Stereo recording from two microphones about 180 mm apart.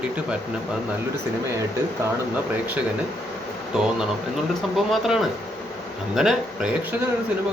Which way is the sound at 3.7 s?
5° right (ahead or behind).